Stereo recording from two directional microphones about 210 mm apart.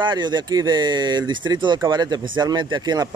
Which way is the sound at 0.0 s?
20° right (ahead or behind).